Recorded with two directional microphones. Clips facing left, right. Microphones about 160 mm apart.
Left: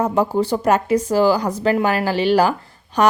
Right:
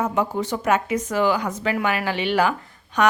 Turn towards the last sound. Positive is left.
turn(degrees=35)  # may be behind; listen again after turning